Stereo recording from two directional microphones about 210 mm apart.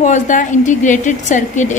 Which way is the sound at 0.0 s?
35° left (ahead or behind).